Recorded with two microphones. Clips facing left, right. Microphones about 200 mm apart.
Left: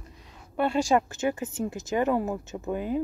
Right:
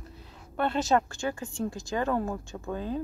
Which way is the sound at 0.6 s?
10° left (ahead or behind).